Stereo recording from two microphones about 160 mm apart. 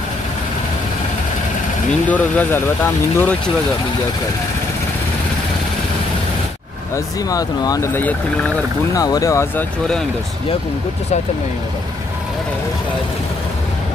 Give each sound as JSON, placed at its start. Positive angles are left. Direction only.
{"t": 1.9, "sound": "speech", "side_deg": 10}
{"t": 7.2, "sound": "speech", "side_deg": 20}
{"t": 8.9, "sound": "speech", "side_deg": 20}